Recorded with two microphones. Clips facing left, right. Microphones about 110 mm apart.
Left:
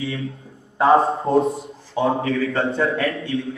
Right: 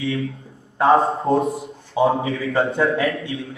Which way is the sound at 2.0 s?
25° right (ahead or behind).